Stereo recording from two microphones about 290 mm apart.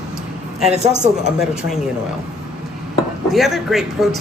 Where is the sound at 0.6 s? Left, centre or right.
Right.